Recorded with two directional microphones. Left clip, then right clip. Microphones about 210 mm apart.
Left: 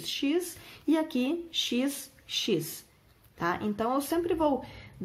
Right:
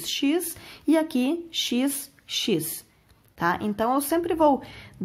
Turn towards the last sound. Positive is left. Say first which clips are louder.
# right 7 dB
turn(degrees=-40)  # may be behind; listen again after turning